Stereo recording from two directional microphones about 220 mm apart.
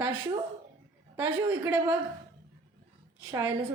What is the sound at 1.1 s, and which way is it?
Speech, 10° right (ahead or behind).